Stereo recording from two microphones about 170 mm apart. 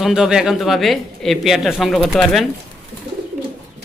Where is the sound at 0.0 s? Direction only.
5° right (ahead or behind).